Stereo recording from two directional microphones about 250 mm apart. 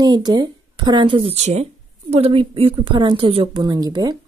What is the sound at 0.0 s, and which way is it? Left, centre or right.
A woman's voice, centre.